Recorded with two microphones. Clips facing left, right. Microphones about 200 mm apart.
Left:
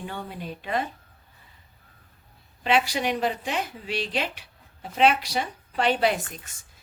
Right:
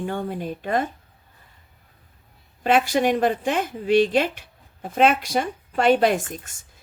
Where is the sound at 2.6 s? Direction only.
50° right (ahead or behind).